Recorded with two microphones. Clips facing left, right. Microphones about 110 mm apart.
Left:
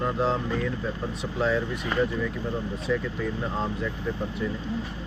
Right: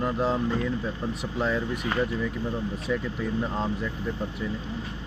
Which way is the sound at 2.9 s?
5° right (ahead or behind).